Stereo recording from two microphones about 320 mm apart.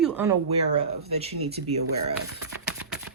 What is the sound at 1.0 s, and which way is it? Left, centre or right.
Speech, centre.